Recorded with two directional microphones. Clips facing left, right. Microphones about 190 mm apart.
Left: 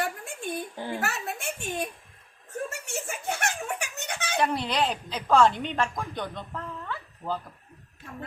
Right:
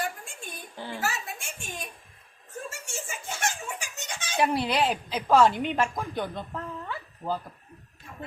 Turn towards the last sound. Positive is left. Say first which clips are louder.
# right 1 dB
turn(degrees=-10)  # may be behind; listen again after turning